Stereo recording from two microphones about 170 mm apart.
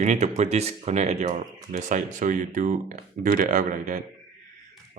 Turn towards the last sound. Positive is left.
turn(degrees=-50)  # may be behind; listen again after turning